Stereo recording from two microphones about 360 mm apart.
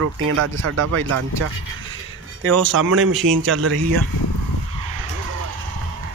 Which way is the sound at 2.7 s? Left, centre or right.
Right.